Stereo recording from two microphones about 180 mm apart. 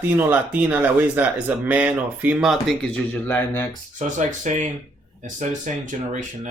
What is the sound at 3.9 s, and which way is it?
Speech, 45° right (ahead or behind).